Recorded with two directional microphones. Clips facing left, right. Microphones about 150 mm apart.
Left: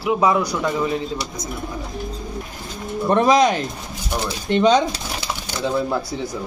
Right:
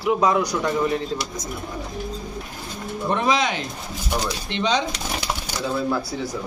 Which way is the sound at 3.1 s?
45° left (ahead or behind).